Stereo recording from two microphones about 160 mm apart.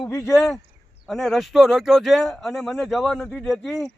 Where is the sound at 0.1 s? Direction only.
20° left (ahead or behind).